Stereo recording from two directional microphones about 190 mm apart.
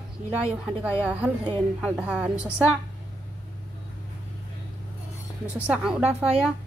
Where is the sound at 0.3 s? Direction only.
5° right (ahead or behind).